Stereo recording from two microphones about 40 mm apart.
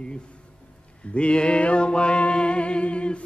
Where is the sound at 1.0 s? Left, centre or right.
Left.